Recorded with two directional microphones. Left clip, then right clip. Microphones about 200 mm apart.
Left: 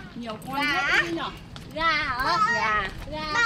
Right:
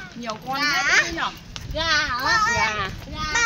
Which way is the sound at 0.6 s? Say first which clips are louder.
Right 3 dB; 40° right (ahead or behind).